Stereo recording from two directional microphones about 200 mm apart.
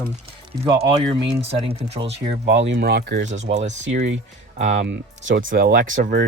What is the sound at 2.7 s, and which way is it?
Speech, 55° right (ahead or behind).